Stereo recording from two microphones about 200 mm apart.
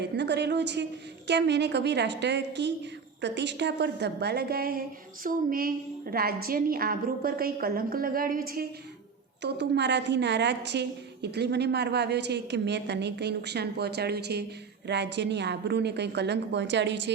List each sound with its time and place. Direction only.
0.0 s a woman's voice: 60° right (ahead or behind)
9.4 s a woman's voice: 60° right (ahead or behind)